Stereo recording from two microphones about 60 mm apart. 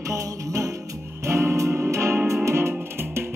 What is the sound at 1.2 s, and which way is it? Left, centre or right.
Music, right.